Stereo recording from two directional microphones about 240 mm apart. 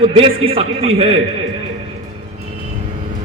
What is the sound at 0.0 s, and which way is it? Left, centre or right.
A man's voice, right.